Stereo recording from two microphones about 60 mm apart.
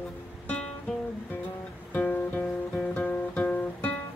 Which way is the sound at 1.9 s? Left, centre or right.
Left.